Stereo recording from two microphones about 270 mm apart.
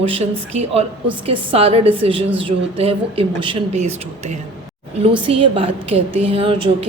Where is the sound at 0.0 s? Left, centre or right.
Right.